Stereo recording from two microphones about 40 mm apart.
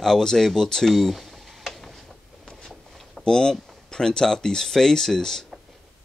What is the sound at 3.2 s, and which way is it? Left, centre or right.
Speech, centre.